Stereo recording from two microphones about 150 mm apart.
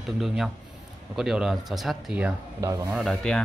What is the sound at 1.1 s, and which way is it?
Speech, 5° right (ahead or behind).